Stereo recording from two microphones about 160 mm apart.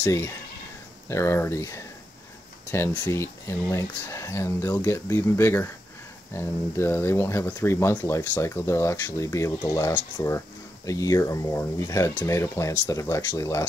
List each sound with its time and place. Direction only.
0.0 s speech: 15° left (ahead or behind)